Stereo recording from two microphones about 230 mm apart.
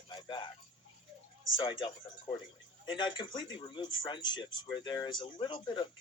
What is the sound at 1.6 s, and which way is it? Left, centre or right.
A man's voice, left.